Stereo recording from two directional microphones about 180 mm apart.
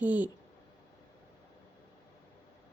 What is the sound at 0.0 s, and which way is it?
Speech, 10° right (ahead or behind).